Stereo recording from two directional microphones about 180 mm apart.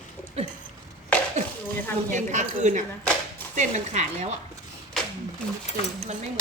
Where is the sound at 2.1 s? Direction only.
40° right (ahead or behind).